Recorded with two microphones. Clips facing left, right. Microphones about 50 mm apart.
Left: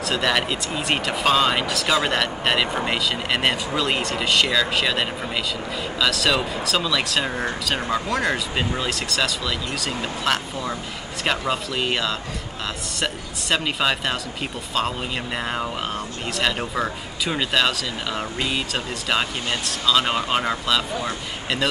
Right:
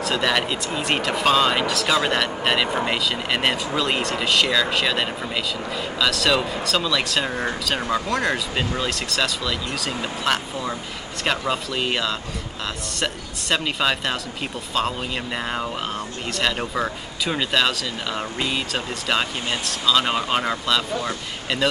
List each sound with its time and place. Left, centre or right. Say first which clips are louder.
0.0 s speech: even; centre